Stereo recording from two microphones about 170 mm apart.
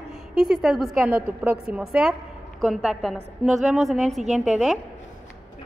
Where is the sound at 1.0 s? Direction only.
10° right (ahead or behind).